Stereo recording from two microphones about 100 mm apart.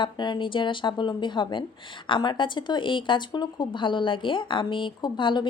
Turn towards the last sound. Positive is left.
turn(degrees=50)  # may be behind; listen again after turning